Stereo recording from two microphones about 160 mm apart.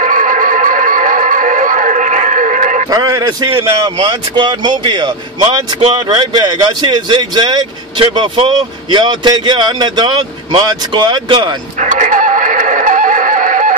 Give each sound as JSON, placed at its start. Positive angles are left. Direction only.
{"t": 0.0, "sound": "music", "side_deg": -55}
{"t": 2.9, "sound": "a man's voice", "side_deg": -25}
{"t": 11.8, "sound": "music", "side_deg": -50}